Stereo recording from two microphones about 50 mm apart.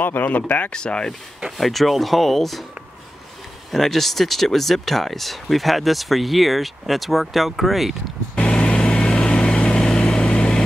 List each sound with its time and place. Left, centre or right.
0.2 s speech: left
0.7 s speech: centre
1.6 s speech: centre
3.7 s speech: centre
8.4 s vehicle: left